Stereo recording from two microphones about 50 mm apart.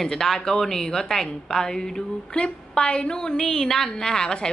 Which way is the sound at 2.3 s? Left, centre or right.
Centre.